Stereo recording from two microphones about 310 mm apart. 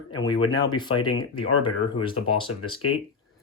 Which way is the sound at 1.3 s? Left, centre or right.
Left.